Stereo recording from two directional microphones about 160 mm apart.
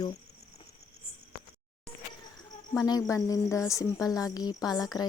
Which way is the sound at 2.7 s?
20° left (ahead or behind).